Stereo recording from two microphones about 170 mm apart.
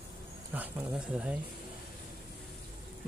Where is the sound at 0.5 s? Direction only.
10° right (ahead or behind).